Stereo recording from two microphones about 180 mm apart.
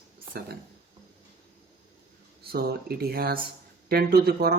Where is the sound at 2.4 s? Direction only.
60° right (ahead or behind).